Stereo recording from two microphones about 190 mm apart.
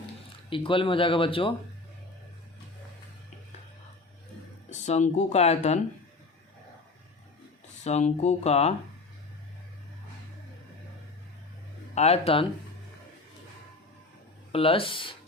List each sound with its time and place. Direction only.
0.5 s speech: 25° left (ahead or behind)
4.7 s speech: 35° left (ahead or behind)
7.9 s speech: 35° left (ahead or behind)
11.9 s speech: 35° left (ahead or behind)
14.5 s speech: 30° left (ahead or behind)